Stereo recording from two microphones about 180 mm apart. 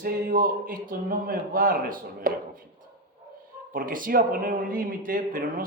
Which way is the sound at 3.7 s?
50° right (ahead or behind).